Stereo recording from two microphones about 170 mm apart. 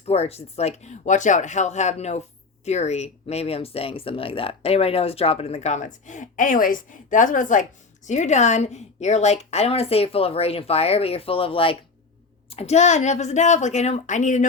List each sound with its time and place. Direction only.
0.0 s speech: 35° left (ahead or behind)